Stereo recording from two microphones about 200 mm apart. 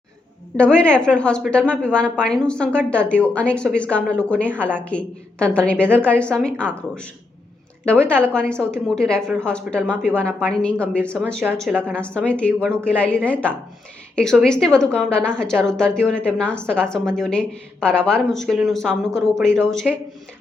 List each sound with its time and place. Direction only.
0.5 s a woman's voice: 5° left (ahead or behind)